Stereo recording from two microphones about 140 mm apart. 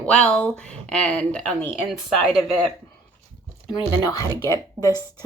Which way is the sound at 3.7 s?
30° left (ahead or behind).